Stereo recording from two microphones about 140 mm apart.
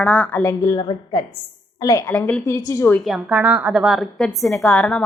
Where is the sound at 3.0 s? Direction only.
Centre (ahead or behind).